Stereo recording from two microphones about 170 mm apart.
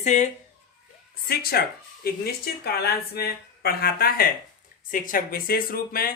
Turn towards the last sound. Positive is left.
turn(degrees=60)  # may be behind; listen again after turning